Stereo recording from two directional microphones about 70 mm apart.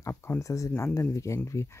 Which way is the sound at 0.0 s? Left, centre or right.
Left.